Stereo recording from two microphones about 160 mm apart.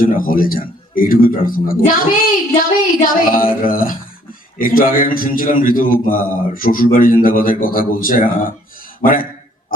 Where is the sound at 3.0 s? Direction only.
60° left (ahead or behind).